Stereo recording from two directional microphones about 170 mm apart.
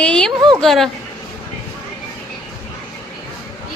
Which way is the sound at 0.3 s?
25° right (ahead or behind).